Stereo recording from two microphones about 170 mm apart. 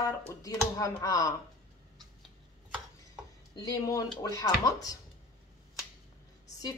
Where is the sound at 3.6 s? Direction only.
20° left (ahead or behind).